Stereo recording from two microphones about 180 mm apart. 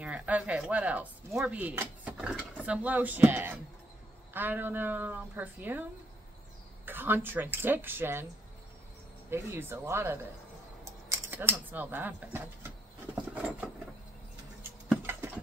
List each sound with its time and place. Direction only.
0.0 s speech: 10° right (ahead or behind)
6.9 s speech: 10° right (ahead or behind)
9.3 s speech: 15° right (ahead or behind)
10.8 s typing: 15° right (ahead or behind)
14.6 s a sound: 10° right (ahead or behind)